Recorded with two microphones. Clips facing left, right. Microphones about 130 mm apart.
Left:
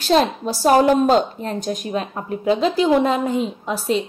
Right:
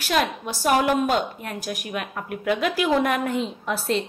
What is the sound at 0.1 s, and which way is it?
A woman's voice, 30° left (ahead or behind).